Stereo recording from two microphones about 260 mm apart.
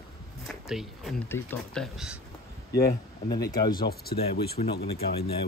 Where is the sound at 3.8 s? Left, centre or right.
Left.